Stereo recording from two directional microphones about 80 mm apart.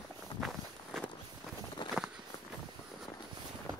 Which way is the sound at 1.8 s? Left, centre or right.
Left.